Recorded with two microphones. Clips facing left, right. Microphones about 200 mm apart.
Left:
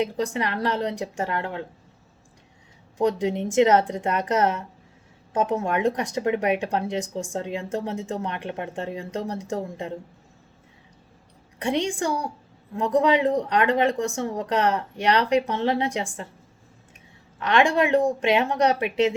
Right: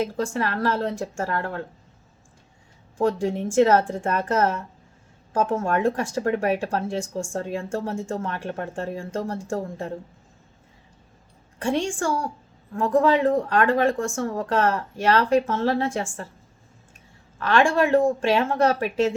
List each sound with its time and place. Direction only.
0.0 s speech: 20° left (ahead or behind)
3.0 s speech: 20° left (ahead or behind)
11.6 s speech: 20° left (ahead or behind)
17.4 s speech: 20° left (ahead or behind)